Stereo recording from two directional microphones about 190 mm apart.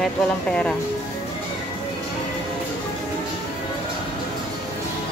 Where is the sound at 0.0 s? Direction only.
5° left (ahead or behind).